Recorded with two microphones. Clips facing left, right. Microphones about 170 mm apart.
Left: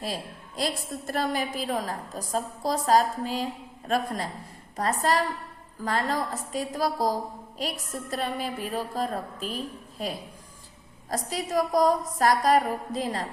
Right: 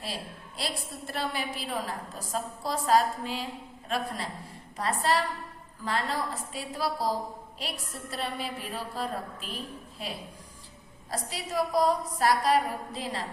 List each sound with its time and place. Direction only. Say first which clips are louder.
0.0 s a woman's voice: left 4 dB; 45° left (ahead or behind)